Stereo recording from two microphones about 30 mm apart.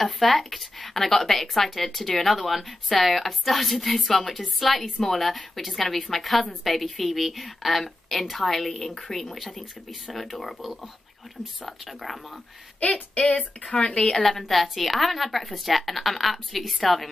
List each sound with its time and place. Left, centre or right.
0.0 s a woman's voice: centre
12.8 s speech: left
13.7 s speech: left
14.2 s a woman's voice: centre